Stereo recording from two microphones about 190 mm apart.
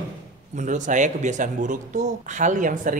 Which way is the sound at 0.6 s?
40° right (ahead or behind).